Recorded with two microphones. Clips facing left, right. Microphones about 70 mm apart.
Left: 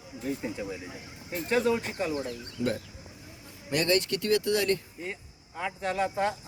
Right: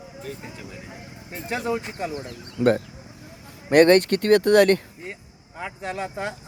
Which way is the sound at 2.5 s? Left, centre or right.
Right.